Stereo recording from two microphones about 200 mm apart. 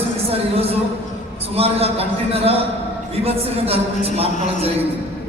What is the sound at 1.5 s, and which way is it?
A man's voice, 30° right (ahead or behind).